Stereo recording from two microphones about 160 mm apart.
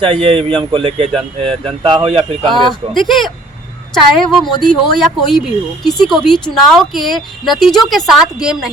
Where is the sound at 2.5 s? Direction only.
Centre (ahead or behind).